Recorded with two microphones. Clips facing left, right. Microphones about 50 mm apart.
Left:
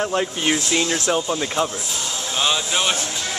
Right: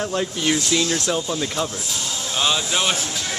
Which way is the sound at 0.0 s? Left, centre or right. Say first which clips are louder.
Left 2 dB; centre.